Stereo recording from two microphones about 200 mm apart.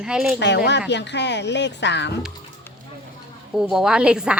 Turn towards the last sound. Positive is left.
turn(degrees=-5)  # may be behind; listen again after turning